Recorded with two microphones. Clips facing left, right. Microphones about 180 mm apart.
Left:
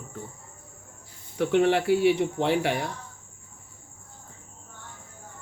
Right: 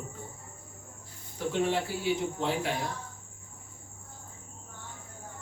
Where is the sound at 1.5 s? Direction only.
70° left (ahead or behind).